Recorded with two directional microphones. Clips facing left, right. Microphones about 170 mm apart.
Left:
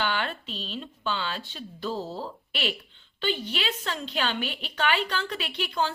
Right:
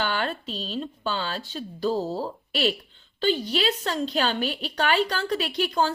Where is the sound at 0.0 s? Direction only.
40° right (ahead or behind).